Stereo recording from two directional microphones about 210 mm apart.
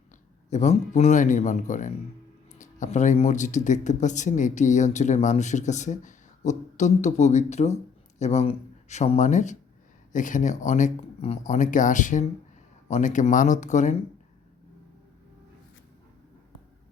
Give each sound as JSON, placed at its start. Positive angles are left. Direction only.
{"t": 0.5, "sound": "speech", "side_deg": 30}